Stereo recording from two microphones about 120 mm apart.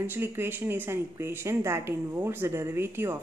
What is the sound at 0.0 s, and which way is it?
Speech, 20° right (ahead or behind).